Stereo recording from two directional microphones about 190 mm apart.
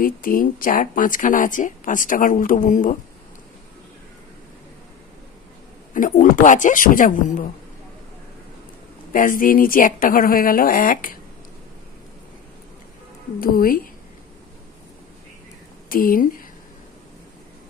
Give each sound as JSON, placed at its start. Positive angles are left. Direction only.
{"t": 0.0, "sound": "speech", "side_deg": 50}
{"t": 5.9, "sound": "speech", "side_deg": 45}
{"t": 9.1, "sound": "speech", "side_deg": 45}
{"t": 13.4, "sound": "speech", "side_deg": 50}
{"t": 15.9, "sound": "speech", "side_deg": 50}